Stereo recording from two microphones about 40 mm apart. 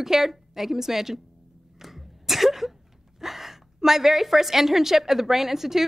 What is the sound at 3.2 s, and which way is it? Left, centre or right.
A woman's voice, centre.